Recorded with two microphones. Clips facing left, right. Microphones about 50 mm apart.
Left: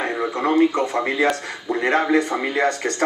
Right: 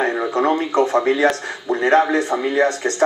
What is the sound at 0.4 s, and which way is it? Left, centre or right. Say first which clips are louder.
Speech: even; centre.